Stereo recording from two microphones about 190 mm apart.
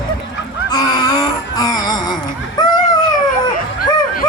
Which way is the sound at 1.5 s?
20° left (ahead or behind).